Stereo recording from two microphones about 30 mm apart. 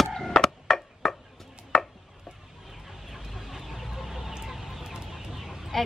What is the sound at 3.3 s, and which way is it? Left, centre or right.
Vehicle, centre.